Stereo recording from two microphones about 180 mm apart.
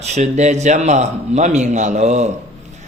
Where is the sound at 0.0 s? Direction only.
40° right (ahead or behind).